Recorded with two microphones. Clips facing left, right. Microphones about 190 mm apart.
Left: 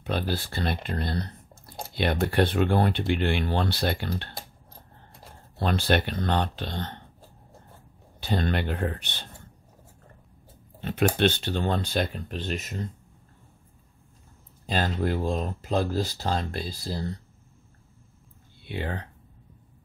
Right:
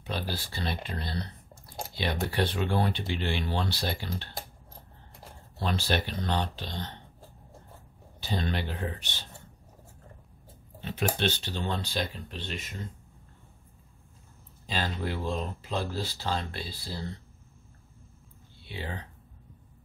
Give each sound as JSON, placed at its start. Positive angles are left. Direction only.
{"t": 0.0, "sound": "speech", "side_deg": 55}
{"t": 5.6, "sound": "speech", "side_deg": 55}
{"t": 8.2, "sound": "speech", "side_deg": 55}
{"t": 10.8, "sound": "speech", "side_deg": 55}
{"t": 14.7, "sound": "speech", "side_deg": 50}
{"t": 18.7, "sound": "speech", "side_deg": 55}